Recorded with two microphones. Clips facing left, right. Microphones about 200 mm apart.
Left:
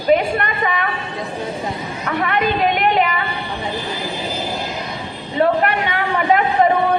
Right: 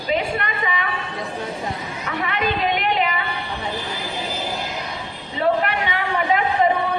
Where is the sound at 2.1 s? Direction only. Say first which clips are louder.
Left 5 dB; 55° left (ahead or behind).